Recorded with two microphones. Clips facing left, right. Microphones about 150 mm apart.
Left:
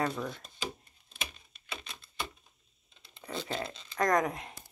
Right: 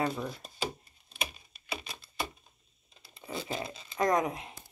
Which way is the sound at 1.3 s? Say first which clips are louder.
Right 4 dB; 5° right (ahead or behind).